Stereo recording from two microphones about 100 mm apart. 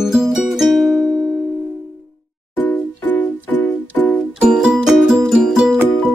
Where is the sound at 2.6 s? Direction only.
20° left (ahead or behind).